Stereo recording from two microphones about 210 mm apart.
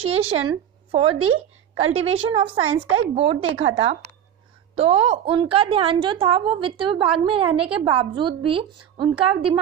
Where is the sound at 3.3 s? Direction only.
70° right (ahead or behind).